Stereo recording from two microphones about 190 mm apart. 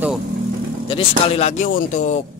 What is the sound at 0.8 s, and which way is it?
Speech, 30° left (ahead or behind).